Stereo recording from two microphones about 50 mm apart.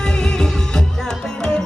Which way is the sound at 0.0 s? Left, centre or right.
Centre.